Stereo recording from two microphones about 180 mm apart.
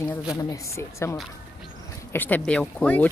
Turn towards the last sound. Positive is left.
turn(degrees=10)  # may be behind; listen again after turning